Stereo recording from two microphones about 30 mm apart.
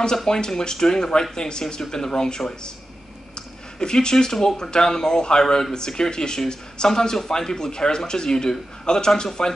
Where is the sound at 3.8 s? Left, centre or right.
Left.